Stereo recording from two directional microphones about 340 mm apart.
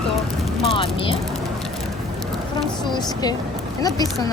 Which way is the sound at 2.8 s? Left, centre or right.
Centre.